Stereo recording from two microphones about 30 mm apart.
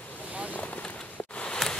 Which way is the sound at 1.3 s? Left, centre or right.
Left.